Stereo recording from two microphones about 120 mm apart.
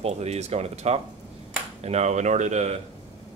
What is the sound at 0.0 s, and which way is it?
Speech, 65° right (ahead or behind).